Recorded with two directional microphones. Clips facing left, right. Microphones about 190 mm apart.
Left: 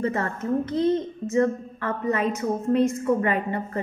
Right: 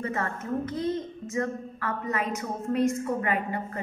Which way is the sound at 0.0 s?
30° left (ahead or behind).